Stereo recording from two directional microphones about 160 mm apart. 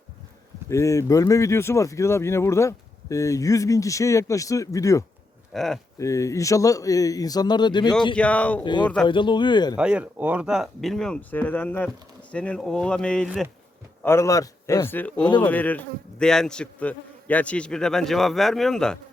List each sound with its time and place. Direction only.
0.7 s speech: 20° left (ahead or behind)
5.5 s speech: centre (ahead or behind)
6.0 s speech: 20° left (ahead or behind)
8.1 s a man's voice: 10° left (ahead or behind)
8.6 s speech: 30° left (ahead or behind)
9.7 s speech: 5° right (ahead or behind)
14.0 s a man's voice: 15° left (ahead or behind)